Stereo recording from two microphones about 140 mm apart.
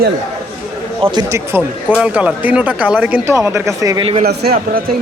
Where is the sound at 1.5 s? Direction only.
15° right (ahead or behind).